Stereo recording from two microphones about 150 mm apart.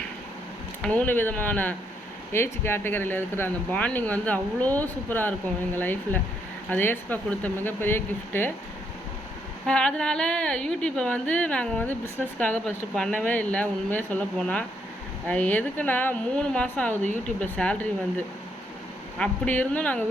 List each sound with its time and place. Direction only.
0.8 s speech: 10° left (ahead or behind)
9.6 s speech: 5° left (ahead or behind)
19.2 s speech: 10° left (ahead or behind)